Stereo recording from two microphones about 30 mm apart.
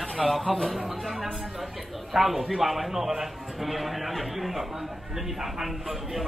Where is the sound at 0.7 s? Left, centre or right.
Centre.